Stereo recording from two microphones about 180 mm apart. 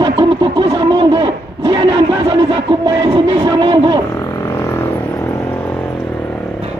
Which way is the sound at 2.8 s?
25° right (ahead or behind).